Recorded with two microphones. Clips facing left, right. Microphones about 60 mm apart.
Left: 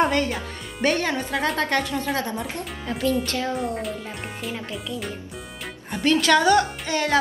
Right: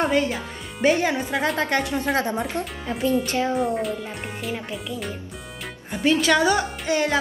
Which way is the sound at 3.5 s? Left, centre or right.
Centre.